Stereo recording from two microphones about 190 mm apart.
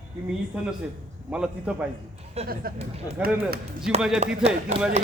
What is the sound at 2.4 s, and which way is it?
Speech, 50° right (ahead or behind).